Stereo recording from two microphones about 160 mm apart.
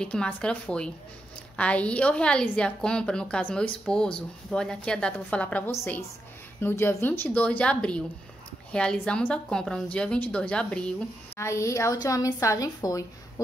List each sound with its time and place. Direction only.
0.0 s a woman's voice: 5° left (ahead or behind)
11.3 s a woman's voice: 20° left (ahead or behind)